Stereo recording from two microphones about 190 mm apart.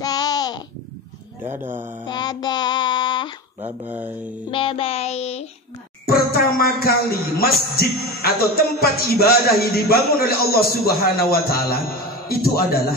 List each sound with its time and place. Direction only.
0.0 s a sound: 20° left (ahead or behind)
1.4 s speech: 10° right (ahead or behind)
2.0 s music: 20° left (ahead or behind)
3.8 s speech: 10° right (ahead or behind)
4.5 s music: 30° left (ahead or behind)
6.0 s speech: 50° left (ahead or behind)